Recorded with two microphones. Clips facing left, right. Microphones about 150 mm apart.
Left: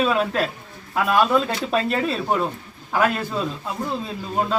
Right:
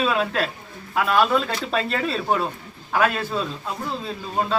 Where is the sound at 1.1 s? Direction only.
15° left (ahead or behind).